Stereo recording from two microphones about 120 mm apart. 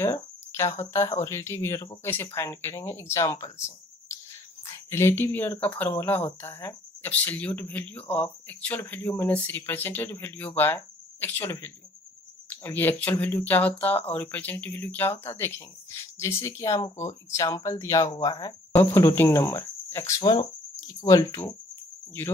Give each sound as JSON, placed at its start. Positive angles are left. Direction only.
{"t": 0.0, "sound": "speech", "side_deg": 25}
{"t": 3.4, "sound": "a sound", "side_deg": 25}
{"t": 4.6, "sound": "speech", "side_deg": 20}
{"t": 20.2, "sound": "speech", "side_deg": 35}